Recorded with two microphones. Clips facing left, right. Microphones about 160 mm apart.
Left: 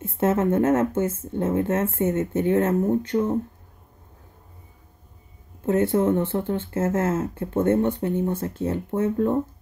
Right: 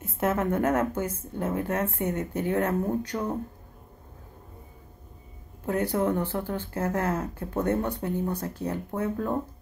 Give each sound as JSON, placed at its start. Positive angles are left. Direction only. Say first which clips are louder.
{"t": 0.0, "sound": "speech", "louder": "left 5 dB", "side_deg": 25}
{"t": 5.7, "sound": "speech", "louder": "left 6 dB", "side_deg": 25}